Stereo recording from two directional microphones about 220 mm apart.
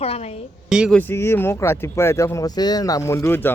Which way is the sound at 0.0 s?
30° left (ahead or behind).